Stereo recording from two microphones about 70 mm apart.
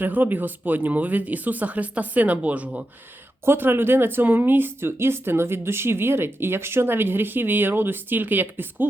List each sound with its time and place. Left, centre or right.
0.0 s speech: right
3.4 s speech: right